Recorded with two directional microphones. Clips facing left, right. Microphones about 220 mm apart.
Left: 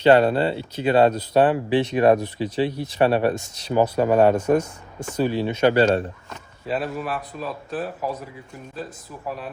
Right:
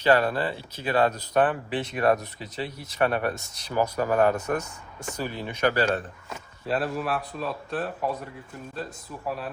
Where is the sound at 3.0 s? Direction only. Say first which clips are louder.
Left 6 dB; 30° left (ahead or behind).